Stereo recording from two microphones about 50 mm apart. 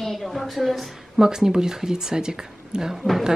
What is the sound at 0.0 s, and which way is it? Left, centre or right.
A woman's voice, centre.